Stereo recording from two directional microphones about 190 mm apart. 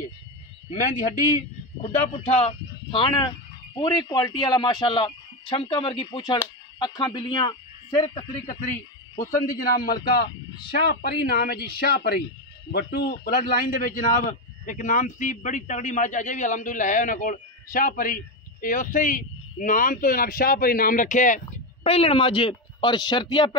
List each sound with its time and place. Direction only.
1.8 s speech: 35° left (ahead or behind)
9.6 s a man's voice: 50° left (ahead or behind); by 23.5 s 25° left (ahead or behind)